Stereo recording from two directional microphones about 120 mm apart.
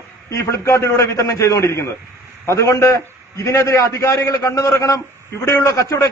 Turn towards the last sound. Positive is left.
turn(degrees=25)  # may be behind; listen again after turning